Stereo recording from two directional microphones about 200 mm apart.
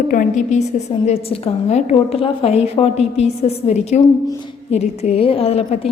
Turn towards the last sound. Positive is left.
turn(degrees=30)  # may be behind; listen again after turning